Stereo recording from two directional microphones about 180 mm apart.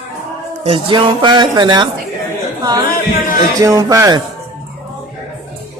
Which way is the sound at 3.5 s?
20° right (ahead or behind).